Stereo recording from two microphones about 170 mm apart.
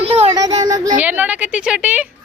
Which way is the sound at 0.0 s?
35° right (ahead or behind).